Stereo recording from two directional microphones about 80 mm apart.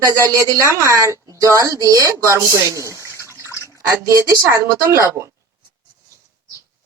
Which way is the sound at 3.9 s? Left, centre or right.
Right.